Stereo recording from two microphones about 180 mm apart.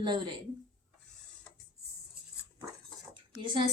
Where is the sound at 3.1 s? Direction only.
25° right (ahead or behind).